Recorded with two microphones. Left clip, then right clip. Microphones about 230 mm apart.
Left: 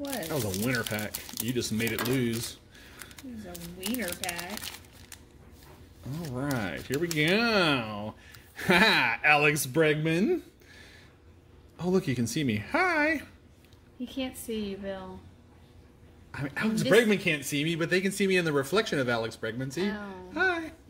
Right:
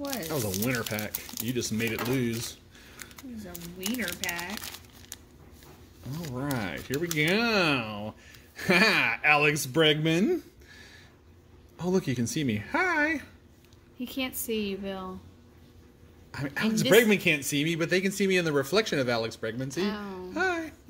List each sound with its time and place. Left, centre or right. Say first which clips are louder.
0.3 s speech: even; centre
4.2 s crumpling: right 2 dB; centre
6.1 s speech: even; centre
9.7 s speech: right 2 dB; centre
14.0 s a woman's voice: right 2 dB; right
16.3 s speech: right 1 dB; centre
19.8 s a woman's voice: right 1 dB; right
20.3 s a sound: left 1 dB; centre